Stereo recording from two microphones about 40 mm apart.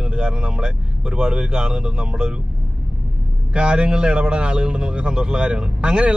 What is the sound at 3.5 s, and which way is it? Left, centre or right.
Speech, right.